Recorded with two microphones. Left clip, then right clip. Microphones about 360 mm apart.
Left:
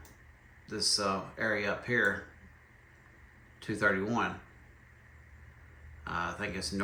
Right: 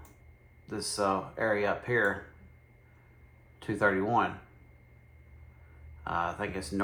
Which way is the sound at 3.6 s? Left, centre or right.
Centre.